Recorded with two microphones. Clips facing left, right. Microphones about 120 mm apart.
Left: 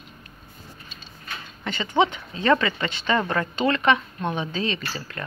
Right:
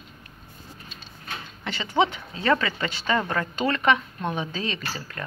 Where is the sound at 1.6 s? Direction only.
15° right (ahead or behind).